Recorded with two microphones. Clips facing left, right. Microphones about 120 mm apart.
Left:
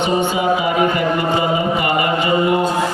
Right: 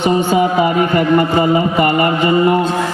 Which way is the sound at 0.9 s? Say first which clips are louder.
Right 5 dB; 45° right (ahead or behind).